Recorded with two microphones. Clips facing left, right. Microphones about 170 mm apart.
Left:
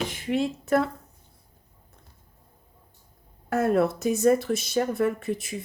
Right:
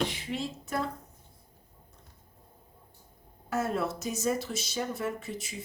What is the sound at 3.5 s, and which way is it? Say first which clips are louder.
Speech: left 8 dB; 55° left (ahead or behind).